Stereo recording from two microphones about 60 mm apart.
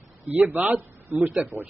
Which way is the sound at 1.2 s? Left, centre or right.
Right.